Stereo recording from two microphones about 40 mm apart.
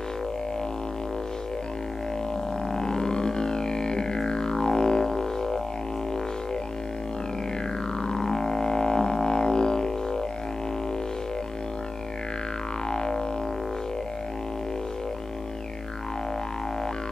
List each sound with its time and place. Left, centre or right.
2.7 s music: centre
8.0 s music: centre
12.9 s music: centre